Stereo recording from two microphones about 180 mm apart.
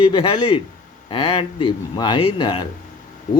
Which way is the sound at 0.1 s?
30° left (ahead or behind).